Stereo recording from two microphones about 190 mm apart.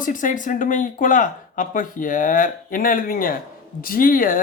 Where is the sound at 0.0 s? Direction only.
45° left (ahead or behind).